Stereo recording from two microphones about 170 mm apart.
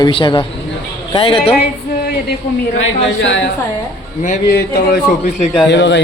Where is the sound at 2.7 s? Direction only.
90° left.